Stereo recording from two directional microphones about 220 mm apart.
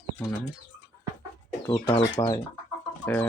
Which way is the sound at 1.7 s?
25° left (ahead or behind).